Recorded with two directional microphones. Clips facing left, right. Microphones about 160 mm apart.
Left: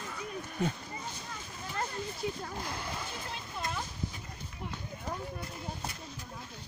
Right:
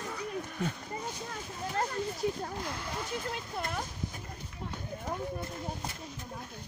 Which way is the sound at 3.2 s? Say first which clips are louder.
Right 2 dB; 50° right (ahead or behind).